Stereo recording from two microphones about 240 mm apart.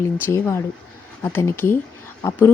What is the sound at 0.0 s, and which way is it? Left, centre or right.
Speech, centre.